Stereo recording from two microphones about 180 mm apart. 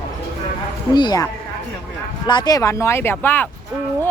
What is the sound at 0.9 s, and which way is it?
Speech, 25° left (ahead or behind).